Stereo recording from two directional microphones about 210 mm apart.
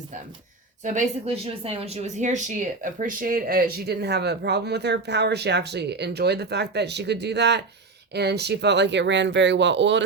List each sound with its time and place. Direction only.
0.9 s speech: 35° right (ahead or behind); by 10.0 s 60° right (ahead or behind)